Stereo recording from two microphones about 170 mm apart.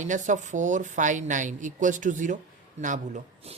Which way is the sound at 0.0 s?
45° right (ahead or behind).